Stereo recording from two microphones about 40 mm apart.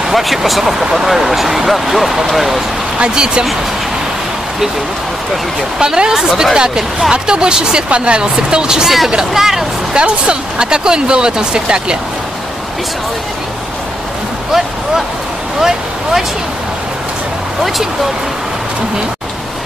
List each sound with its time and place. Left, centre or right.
0.0 s speech: centre
3.0 s speech: right
5.8 s speech: centre
8.8 s speech: centre
9.9 s speech: right
15.6 s speech: centre